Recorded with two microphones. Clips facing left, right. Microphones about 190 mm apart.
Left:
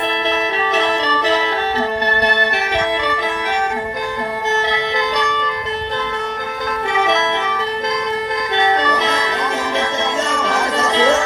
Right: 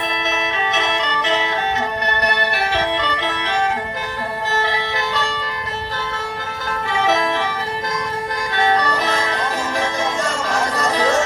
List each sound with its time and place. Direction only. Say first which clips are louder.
0.3 s music: left 3 dB; 35° left (ahead or behind)
10.4 s music: left 1 dB; 25° left (ahead or behind)